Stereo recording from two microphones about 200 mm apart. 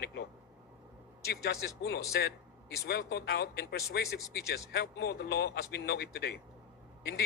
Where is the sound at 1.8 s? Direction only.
55° left (ahead or behind).